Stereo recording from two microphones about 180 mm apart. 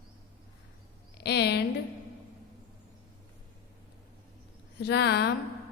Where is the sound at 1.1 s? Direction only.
65° left (ahead or behind).